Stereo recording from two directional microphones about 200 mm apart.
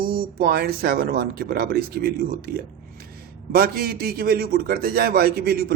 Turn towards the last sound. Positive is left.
turn(degrees=-50)  # may be behind; listen again after turning